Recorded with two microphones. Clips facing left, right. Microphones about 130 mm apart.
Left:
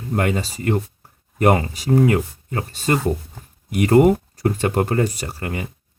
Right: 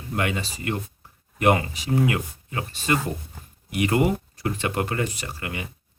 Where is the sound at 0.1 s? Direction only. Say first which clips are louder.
Left 5 dB; 40° left (ahead or behind).